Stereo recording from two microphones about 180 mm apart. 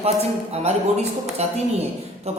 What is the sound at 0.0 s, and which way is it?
Speech, 35° right (ahead or behind).